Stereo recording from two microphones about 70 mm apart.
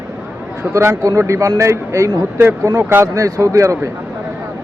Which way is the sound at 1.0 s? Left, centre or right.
Right.